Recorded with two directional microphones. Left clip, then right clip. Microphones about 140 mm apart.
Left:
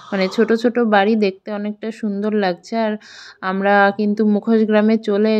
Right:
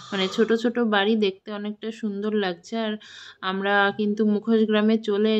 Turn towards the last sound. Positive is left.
turn(degrees=35)  # may be behind; listen again after turning